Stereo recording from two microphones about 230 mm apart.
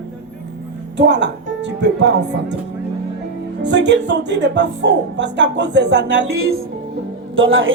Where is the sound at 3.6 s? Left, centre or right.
Right.